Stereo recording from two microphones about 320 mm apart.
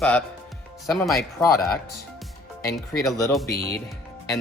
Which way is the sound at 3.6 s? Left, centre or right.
Left.